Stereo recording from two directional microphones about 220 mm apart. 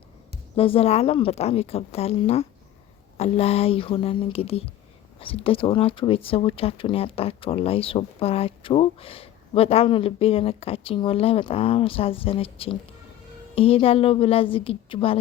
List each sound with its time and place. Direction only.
0.5 s speech: 25° left (ahead or behind)